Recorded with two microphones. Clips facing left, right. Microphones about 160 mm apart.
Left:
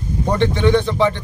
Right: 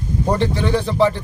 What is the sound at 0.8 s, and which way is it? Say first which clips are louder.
Speech: left 1 dB; 5° right (ahead or behind).